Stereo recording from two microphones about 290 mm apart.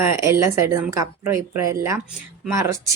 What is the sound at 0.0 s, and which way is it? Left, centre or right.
A woman's voice, centre.